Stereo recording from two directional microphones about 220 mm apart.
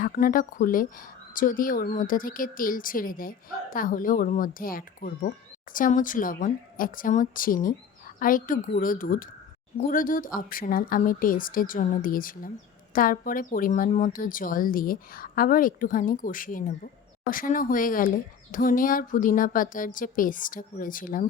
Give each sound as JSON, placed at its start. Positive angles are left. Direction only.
{"t": 0.0, "sound": "speech", "side_deg": 40}